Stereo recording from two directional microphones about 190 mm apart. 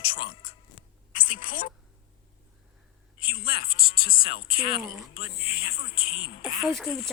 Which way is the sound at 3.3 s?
50° left (ahead or behind).